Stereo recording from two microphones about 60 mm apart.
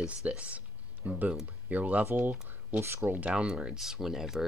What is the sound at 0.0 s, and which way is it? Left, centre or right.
Speech, right.